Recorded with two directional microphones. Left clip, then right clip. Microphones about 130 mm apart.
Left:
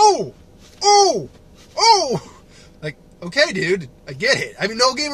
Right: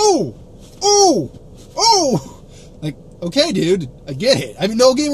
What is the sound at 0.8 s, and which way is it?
Speech, 20° right (ahead or behind).